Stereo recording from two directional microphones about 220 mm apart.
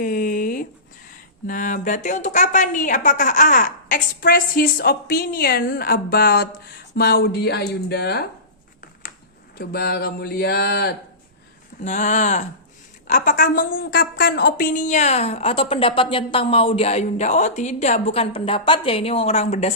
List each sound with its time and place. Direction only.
0.0 s a sound: 40° left (ahead or behind)
1.5 s a woman's voice: 35° left (ahead or behind)
9.6 s speech: 45° left (ahead or behind)
11.8 s a woman's voice: 35° left (ahead or behind)